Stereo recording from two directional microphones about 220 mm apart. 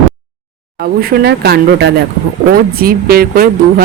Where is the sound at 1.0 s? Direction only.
45° right (ahead or behind).